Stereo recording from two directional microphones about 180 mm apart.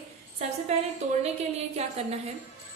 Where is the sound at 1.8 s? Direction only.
35° right (ahead or behind).